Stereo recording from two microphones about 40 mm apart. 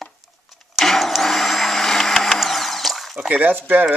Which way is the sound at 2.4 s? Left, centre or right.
Centre.